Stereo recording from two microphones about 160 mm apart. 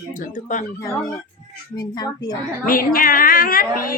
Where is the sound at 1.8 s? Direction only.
25° left (ahead or behind).